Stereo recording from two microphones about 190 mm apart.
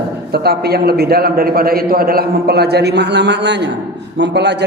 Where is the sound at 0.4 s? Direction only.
55° right (ahead or behind).